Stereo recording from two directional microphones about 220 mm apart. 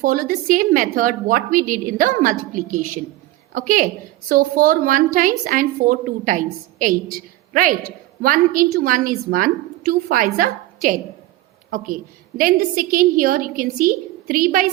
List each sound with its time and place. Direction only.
0.0 s a woman's voice: 40° right (ahead or behind)
11.7 s a woman's voice: 40° right (ahead or behind)